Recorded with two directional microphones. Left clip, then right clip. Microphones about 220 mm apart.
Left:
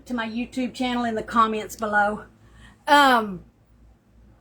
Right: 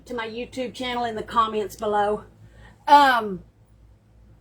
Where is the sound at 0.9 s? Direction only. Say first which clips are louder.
Even; 30° left (ahead or behind).